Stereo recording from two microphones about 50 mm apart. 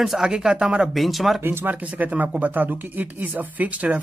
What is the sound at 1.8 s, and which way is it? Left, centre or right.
Speech, right.